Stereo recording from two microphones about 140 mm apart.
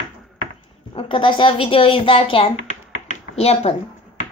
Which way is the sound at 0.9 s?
35° left (ahead or behind).